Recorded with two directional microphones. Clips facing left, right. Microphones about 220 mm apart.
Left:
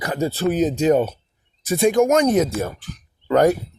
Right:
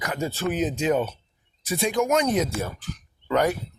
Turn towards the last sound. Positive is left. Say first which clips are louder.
# left 7 dB
turn(degrees=45)  # may be behind; listen again after turning